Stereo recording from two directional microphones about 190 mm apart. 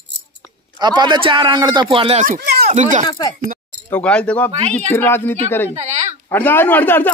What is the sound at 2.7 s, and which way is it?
Speech, 40° right (ahead or behind).